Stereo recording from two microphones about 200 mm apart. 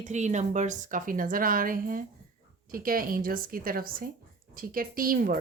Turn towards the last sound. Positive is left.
turn(degrees=-45)  # may be behind; listen again after turning